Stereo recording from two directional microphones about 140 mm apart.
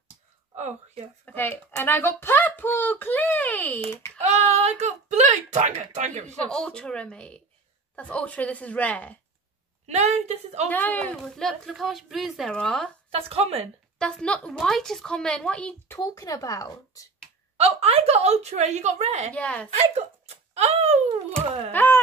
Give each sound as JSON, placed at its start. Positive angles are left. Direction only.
{"t": 0.6, "sound": "speech", "side_deg": -60}
{"t": 1.2, "sound": "speech", "side_deg": 15}
{"t": 4.2, "sound": "speech", "side_deg": -50}
{"t": 6.5, "sound": "speech", "side_deg": 5}
{"t": 9.8, "sound": "speech", "side_deg": -55}
{"t": 10.7, "sound": "speech", "side_deg": 15}
{"t": 13.1, "sound": "speech", "side_deg": -45}
{"t": 13.9, "sound": "speech", "side_deg": 5}
{"t": 16.0, "sound": "speech", "side_deg": 25}
{"t": 17.6, "sound": "speech", "side_deg": -45}
{"t": 19.3, "sound": "speech", "side_deg": 10}
{"t": 19.8, "sound": "speech", "side_deg": -50}
{"t": 21.7, "sound": "a sound", "side_deg": 15}